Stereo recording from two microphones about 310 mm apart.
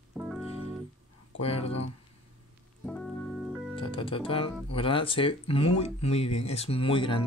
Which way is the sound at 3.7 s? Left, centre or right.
Centre.